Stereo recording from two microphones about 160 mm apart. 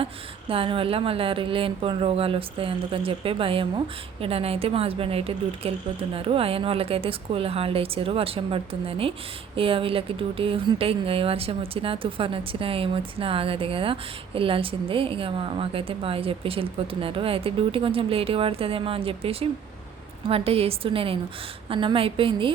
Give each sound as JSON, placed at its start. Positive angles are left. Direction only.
{"t": 0.0, "sound": "a woman's voice", "side_deg": -35}